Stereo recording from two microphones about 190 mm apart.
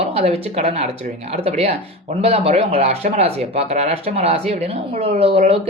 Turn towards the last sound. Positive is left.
turn(degrees=-30)  # may be behind; listen again after turning